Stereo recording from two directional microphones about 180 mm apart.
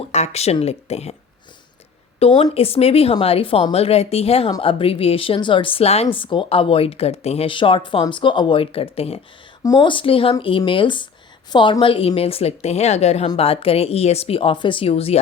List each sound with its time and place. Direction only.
0.1 s a woman's voice: 35° left (ahead or behind)
2.1 s a woman's voice: 30° left (ahead or behind)